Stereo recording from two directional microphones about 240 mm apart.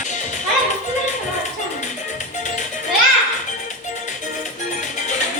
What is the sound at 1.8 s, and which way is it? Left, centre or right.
Music, left.